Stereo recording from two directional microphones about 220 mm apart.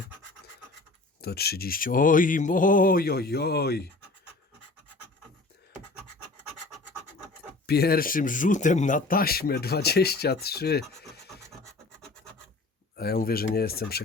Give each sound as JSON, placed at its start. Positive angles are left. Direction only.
{"t": 1.2, "sound": "speech", "side_deg": 45}
{"t": 7.7, "sound": "speech", "side_deg": 45}
{"t": 13.0, "sound": "speech", "side_deg": 45}